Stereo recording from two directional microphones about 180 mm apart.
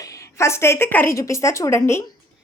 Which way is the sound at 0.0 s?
20° left (ahead or behind).